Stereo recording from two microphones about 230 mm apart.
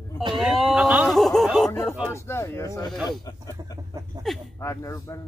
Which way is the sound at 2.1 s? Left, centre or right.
Centre.